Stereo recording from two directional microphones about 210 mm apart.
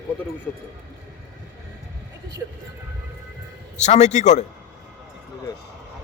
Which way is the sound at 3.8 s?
35° left (ahead or behind).